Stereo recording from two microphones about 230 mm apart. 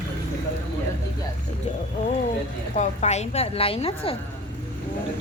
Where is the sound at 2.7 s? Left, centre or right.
Left.